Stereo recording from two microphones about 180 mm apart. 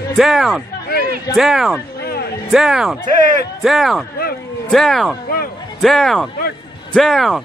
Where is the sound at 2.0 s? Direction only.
65° left (ahead or behind).